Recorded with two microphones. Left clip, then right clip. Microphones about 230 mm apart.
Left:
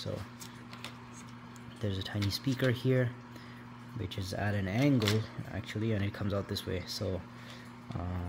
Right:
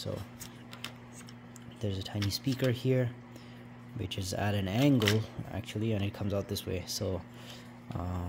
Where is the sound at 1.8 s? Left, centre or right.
Centre.